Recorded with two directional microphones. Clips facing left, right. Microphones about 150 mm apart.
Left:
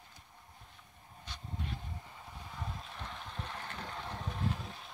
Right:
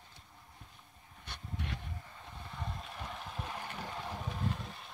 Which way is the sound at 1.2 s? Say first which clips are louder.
Right 1 dB; 65° right (ahead or behind).